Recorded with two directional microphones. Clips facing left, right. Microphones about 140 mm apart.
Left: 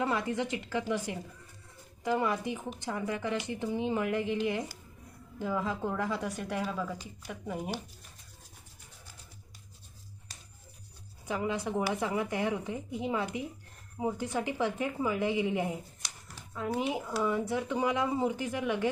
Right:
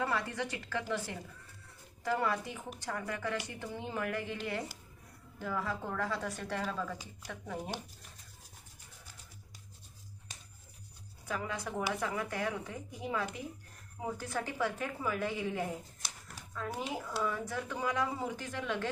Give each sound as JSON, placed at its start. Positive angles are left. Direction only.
{"t": 0.0, "sound": "speech", "side_deg": 20}
{"t": 5.4, "sound": "speech", "side_deg": 20}
{"t": 11.3, "sound": "speech", "side_deg": 20}